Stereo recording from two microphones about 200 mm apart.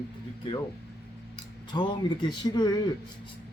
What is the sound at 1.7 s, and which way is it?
Speech, 20° left (ahead or behind).